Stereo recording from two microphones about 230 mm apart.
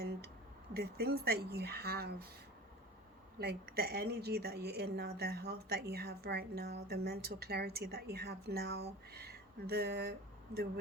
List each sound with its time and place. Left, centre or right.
0.0 s a sound: right
0.7 s a woman's voice: right
3.3 s a woman's voice: right